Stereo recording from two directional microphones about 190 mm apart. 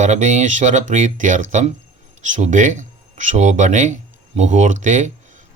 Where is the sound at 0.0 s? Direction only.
40° right (ahead or behind).